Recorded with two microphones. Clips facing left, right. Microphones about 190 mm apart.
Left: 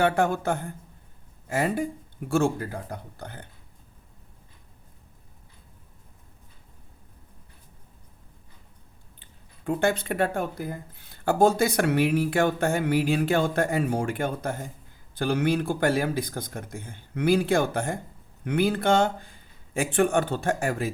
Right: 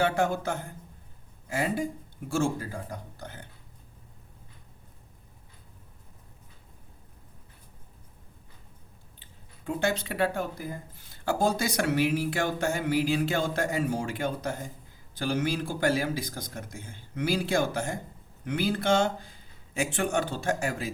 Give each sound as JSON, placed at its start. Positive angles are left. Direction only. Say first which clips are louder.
{"t": 0.0, "sound": "speech", "louder": "left 3 dB", "side_deg": 55}
{"t": 9.6, "sound": "speech", "louder": "left 4 dB", "side_deg": 55}